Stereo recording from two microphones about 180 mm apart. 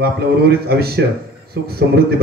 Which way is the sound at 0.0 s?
60° right (ahead or behind).